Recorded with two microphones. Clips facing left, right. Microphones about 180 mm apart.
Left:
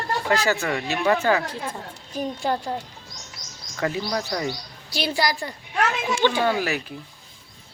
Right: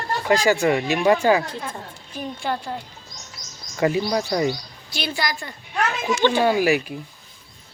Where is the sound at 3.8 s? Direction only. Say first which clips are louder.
Right 5 dB; 15° right (ahead or behind).